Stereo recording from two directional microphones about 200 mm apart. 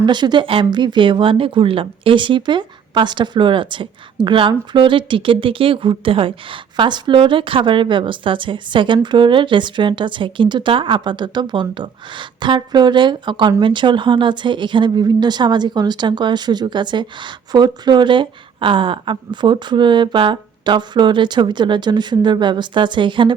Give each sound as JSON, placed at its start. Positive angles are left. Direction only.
{"t": 0.0, "sound": "speech", "side_deg": -20}